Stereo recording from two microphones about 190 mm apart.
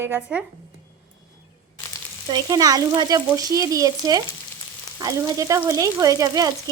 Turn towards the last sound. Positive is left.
turn(degrees=-20)  # may be behind; listen again after turning